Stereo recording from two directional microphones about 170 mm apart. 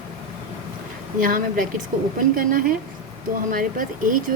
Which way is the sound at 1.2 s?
55° right (ahead or behind).